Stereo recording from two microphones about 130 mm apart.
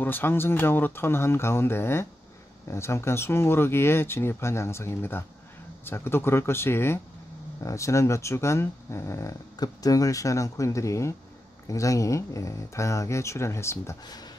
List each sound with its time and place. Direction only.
0.0 s speech: 15° left (ahead or behind)
14.0 s speech: 30° left (ahead or behind)